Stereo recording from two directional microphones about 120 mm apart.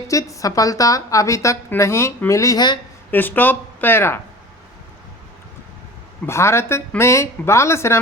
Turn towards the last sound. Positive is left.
turn(degrees=20)  # may be behind; listen again after turning